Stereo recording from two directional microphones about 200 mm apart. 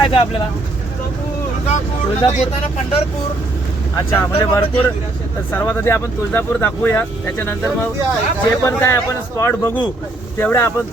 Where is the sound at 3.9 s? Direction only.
15° left (ahead or behind).